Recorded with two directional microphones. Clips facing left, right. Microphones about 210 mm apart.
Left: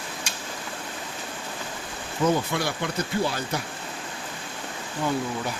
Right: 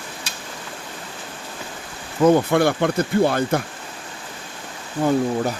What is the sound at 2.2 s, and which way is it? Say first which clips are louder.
Speech: right 9 dB; 55° right (ahead or behind).